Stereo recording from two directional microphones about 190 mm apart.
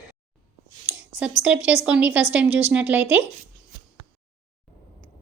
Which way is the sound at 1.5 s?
5° right (ahead or behind).